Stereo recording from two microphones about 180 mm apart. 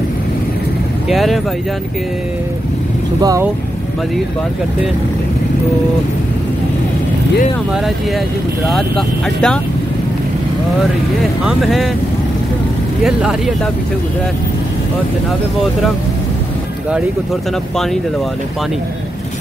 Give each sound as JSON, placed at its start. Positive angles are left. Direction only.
{"t": 1.0, "sound": "speech", "side_deg": 0}
{"t": 3.2, "sound": "speech", "side_deg": -20}
{"t": 8.6, "sound": "speech", "side_deg": 0}
{"t": 11.4, "sound": "speech", "side_deg": 0}
{"t": 13.0, "sound": "speech", "side_deg": -5}